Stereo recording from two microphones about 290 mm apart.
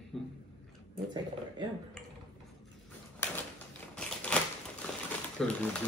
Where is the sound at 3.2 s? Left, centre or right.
Centre.